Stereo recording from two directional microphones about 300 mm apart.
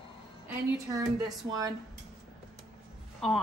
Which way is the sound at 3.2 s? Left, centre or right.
Centre.